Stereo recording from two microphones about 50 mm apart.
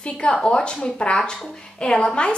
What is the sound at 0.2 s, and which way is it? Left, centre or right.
A woman's voice, centre.